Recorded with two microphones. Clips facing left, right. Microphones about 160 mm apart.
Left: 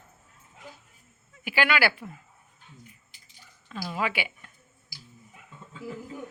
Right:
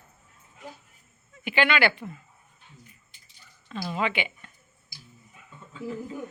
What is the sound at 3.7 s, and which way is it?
Speech, centre (ahead or behind).